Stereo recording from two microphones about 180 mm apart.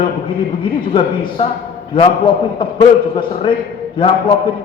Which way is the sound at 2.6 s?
25° left (ahead or behind).